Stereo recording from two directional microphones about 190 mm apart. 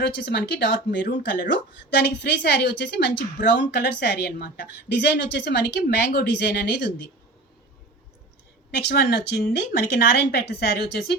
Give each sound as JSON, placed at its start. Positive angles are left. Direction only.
{"t": 0.0, "sound": "a woman's voice", "side_deg": 60}
{"t": 8.7, "sound": "a woman's voice", "side_deg": 60}